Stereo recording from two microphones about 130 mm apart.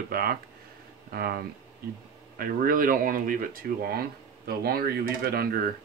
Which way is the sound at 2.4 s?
90° right.